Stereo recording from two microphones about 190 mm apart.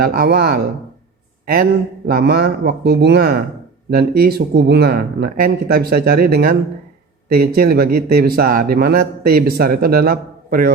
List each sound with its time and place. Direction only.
0.0 s speech: 50° right (ahead or behind)
2.0 s speech: 55° right (ahead or behind)